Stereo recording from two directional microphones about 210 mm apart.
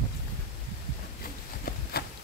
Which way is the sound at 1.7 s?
45° left (ahead or behind).